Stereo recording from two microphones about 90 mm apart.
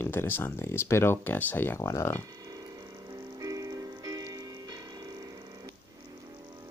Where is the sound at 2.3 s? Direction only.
45° right (ahead or behind).